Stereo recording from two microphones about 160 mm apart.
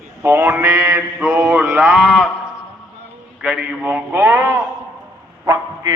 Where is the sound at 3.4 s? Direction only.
5° right (ahead or behind).